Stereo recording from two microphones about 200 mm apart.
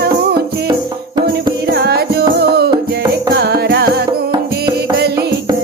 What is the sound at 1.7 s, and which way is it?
Music, 55° right (ahead or behind).